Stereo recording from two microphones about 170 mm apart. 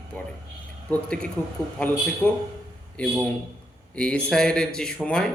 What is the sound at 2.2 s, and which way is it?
A man's voice, 10° left (ahead or behind).